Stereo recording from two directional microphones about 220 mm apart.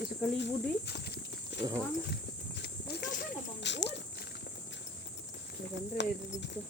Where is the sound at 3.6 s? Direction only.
55° left (ahead or behind).